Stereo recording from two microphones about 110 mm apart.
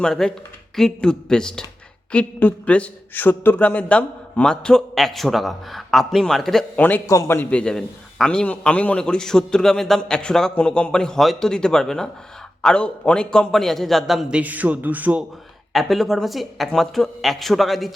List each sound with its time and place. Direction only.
0.0 s a man's voice: 5° left (ahead or behind)
6.7 s a man's voice: 15° left (ahead or behind)
7.1 s a man's voice: 30° left (ahead or behind)
7.3 s a man's voice: 10° left (ahead or behind); by 15.2 s 15° right (ahead or behind)
15.7 s a man's voice: centre (ahead or behind)